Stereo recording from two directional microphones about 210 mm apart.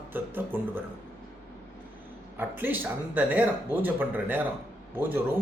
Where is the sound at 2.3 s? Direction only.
10° right (ahead or behind).